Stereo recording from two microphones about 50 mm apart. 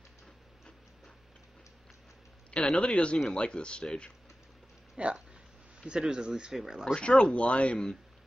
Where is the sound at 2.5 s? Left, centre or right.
Left.